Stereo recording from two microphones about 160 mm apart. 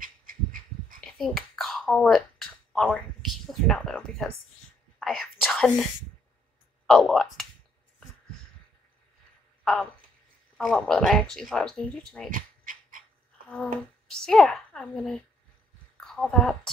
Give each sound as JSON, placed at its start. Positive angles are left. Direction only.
{"t": 0.0, "sound": "heart sounds", "side_deg": -60}
{"t": 1.1, "sound": "a sound", "side_deg": 0}
{"t": 5.0, "sound": "speech", "side_deg": 0}
{"t": 6.9, "sound": "speech", "side_deg": 5}
{"t": 10.6, "sound": "speech", "side_deg": 5}
{"t": 12.3, "sound": "a sound", "side_deg": -55}
{"t": 13.5, "sound": "speech", "side_deg": 5}